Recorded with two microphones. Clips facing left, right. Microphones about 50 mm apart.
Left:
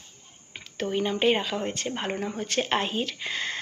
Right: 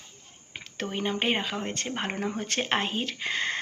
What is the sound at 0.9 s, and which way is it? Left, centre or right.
Speech, right.